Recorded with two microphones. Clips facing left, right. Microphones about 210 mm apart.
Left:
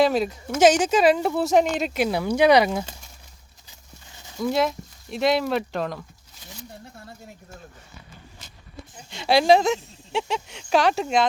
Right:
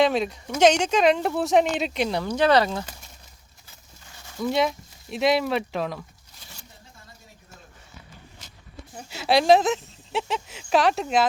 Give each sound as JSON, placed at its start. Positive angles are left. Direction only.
{"t": 0.0, "sound": "speech", "side_deg": 0}
{"t": 3.7, "sound": "a sound", "side_deg": 15}
{"t": 4.4, "sound": "speech", "side_deg": 0}
{"t": 9.0, "sound": "speech", "side_deg": -5}